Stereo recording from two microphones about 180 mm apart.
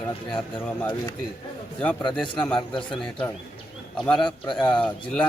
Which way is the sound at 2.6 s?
25° left (ahead or behind).